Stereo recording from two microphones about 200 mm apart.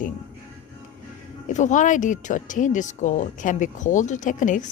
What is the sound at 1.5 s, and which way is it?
Speech, 40° left (ahead or behind).